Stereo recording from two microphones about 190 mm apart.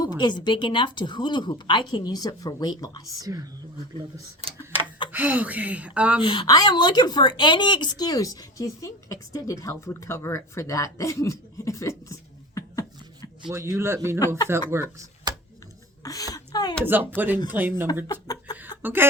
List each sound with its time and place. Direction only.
0.0 s speech: 20° left (ahead or behind)
3.2 s speech: 20° right (ahead or behind)
5.1 s speech: 10° right (ahead or behind)
6.2 s a woman's voice: 25° left (ahead or behind)
13.5 s speech: 15° right (ahead or behind)
16.0 s speech: 20° left (ahead or behind)
16.8 s speech: 10° right (ahead or behind)
18.1 s speech: 20° left (ahead or behind)
18.8 s cough: 10° right (ahead or behind)